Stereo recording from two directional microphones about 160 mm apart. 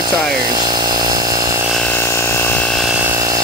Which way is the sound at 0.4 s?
25° right (ahead or behind).